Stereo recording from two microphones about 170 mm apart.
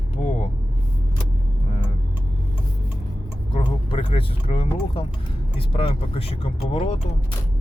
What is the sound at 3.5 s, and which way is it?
Speech, 30° left (ahead or behind).